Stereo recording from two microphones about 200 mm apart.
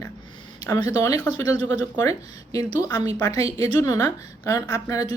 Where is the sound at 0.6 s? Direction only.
15° left (ahead or behind).